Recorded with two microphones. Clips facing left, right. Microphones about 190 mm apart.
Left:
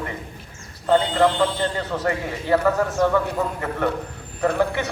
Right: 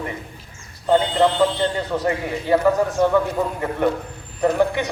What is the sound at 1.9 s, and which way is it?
A man's voice, 15° right (ahead or behind).